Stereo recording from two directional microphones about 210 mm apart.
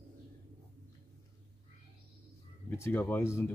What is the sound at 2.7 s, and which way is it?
Speech, 10° left (ahead or behind).